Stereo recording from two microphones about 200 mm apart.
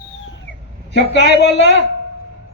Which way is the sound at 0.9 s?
60° left (ahead or behind).